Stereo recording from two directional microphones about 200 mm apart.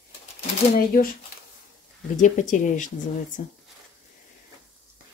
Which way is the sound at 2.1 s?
40° left (ahead or behind).